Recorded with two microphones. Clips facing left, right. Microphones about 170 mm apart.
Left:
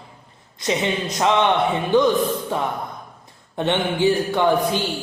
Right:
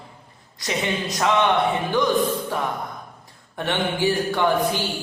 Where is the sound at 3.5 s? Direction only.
20° left (ahead or behind).